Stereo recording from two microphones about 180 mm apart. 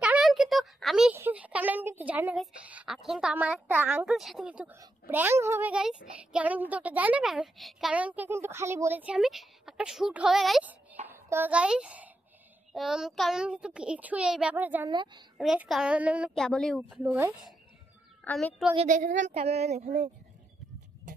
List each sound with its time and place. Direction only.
0.0 s a child's voice: 5° right (ahead or behind)
14.9 s a woman's voice: 25° right (ahead or behind)
15.3 s a child's voice: 5° right (ahead or behind)
16.3 s a child's voice: 5° left (ahead or behind)
16.9 s a child's voice: 10° right (ahead or behind)
18.2 s a child's voice: 5° left (ahead or behind)
19.1 s speech: 40° right (ahead or behind)